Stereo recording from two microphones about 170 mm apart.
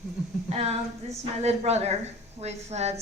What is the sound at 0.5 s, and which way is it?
A woman's voice, 35° right (ahead or behind).